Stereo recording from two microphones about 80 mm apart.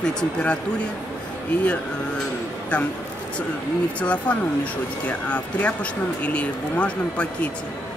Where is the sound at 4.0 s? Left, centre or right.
Centre.